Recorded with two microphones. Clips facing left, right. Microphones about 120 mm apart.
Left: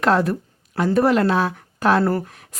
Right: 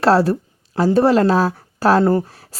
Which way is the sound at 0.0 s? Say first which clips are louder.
Right 4 dB; 30° right (ahead or behind).